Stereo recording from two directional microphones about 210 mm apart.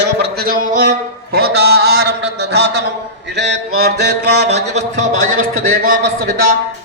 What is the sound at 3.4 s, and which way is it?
Mantra, 55° right (ahead or behind).